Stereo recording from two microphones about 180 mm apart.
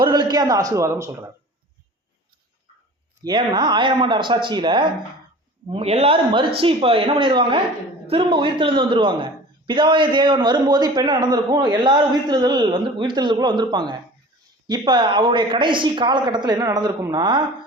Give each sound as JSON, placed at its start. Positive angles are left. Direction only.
{"t": 0.0, "sound": "a woman's voice", "side_deg": -25}
{"t": 3.2, "sound": "a man's voice", "side_deg": -25}